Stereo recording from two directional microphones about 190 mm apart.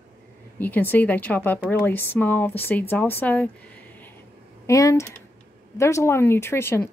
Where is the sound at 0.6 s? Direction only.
10° left (ahead or behind).